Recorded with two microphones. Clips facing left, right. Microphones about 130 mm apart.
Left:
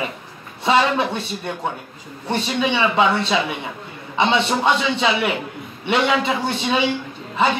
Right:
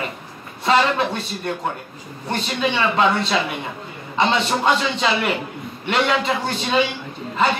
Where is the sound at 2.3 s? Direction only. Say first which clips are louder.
Left 2 dB; 10° left (ahead or behind).